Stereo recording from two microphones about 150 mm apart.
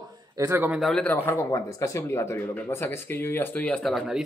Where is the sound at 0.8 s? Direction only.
5° left (ahead or behind).